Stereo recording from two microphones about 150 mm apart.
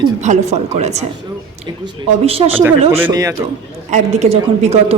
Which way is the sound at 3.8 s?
50° right (ahead or behind).